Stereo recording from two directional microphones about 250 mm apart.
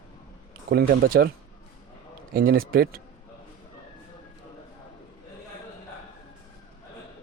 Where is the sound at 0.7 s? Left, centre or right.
Right.